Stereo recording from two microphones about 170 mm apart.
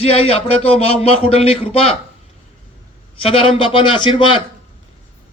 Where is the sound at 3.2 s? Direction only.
35° left (ahead or behind).